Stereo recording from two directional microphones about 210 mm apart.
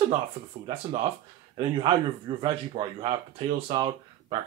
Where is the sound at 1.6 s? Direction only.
20° right (ahead or behind).